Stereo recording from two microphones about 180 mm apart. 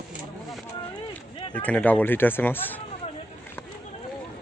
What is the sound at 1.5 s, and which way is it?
A man's voice, 10° left (ahead or behind).